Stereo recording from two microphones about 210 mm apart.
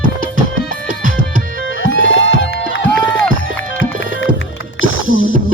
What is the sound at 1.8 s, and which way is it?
Music, 65° left (ahead or behind).